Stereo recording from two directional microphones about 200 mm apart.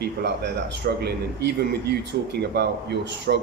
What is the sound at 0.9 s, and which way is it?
Speech, 55° right (ahead or behind).